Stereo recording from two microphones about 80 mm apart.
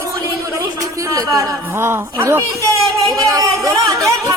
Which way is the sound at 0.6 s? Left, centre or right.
Right.